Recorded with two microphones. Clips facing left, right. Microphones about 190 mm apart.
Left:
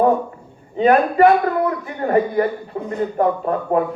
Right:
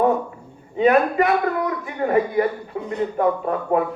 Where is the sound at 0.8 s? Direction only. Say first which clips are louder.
Left 3 dB; 35° left (ahead or behind).